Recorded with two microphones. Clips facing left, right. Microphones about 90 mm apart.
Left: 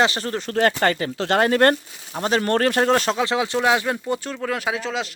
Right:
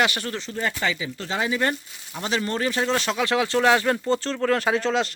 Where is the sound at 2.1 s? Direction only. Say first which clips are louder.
Left 6 dB; 40° left (ahead or behind).